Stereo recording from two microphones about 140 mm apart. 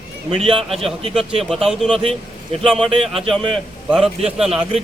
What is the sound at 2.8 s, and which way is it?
Speech, 45° right (ahead or behind).